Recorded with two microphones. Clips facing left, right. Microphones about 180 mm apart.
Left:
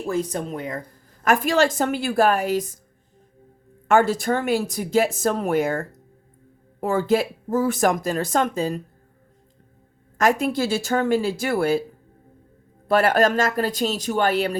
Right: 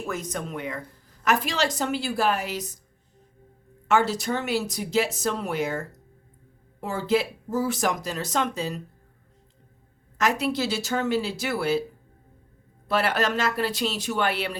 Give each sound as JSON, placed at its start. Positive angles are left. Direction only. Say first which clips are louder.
{"t": 0.0, "sound": "speech", "louder": "left 6 dB", "side_deg": 30}
{"t": 1.2, "sound": "speech", "louder": "left 6 dB", "side_deg": 50}
{"t": 3.8, "sound": "speech", "louder": "left 5 dB", "side_deg": 50}
{"t": 10.2, "sound": "speech", "louder": "left 4 dB", "side_deg": 45}
{"t": 12.9, "sound": "speech", "louder": "left 6 dB", "side_deg": 45}